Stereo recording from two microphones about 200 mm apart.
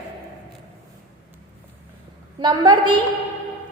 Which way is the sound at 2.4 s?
20° right (ahead or behind).